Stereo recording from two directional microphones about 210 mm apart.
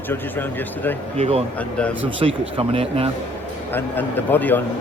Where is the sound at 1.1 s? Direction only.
30° right (ahead or behind).